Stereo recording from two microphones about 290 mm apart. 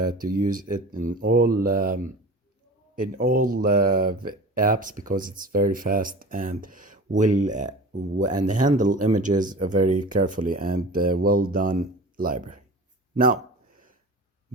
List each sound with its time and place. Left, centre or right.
0.3 s speech: right